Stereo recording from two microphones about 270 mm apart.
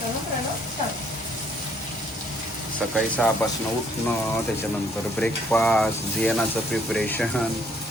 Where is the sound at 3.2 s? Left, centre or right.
Centre.